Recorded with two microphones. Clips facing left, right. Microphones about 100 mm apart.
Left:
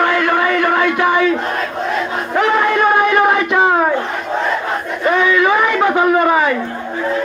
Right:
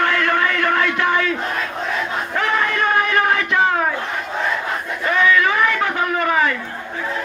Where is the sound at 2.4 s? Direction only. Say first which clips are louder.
Left 7 dB; 15° left (ahead or behind).